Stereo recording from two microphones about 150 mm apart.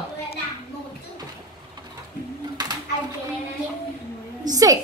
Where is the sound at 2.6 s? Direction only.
25° right (ahead or behind).